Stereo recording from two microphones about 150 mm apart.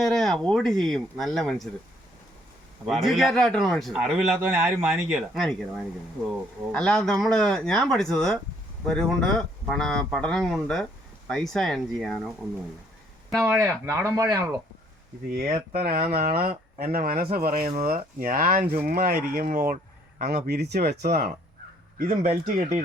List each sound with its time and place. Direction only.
0.0 s speech: centre (ahead or behind)
2.8 s speech: centre (ahead or behind)
4.4 s speech: 15° right (ahead or behind); by 12.2 s 5° left (ahead or behind)
13.3 s speech: 20° right (ahead or behind)
15.8 s speech: 80° right
16.3 s speech: 90° right
21.9 s speech: 60° right (ahead or behind)